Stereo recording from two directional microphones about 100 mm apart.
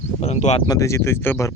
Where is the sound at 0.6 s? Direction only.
30° left (ahead or behind).